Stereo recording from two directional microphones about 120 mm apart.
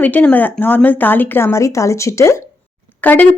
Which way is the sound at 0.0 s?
15° left (ahead or behind).